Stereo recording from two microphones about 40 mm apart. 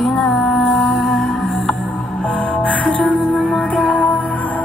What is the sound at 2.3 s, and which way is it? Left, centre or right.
Music, left.